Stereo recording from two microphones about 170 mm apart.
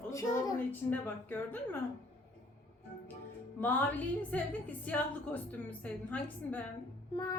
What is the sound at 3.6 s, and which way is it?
A woman's voice, 10° left (ahead or behind).